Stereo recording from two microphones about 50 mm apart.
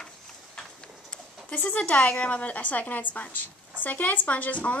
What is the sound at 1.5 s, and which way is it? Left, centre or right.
A woman's voice, left.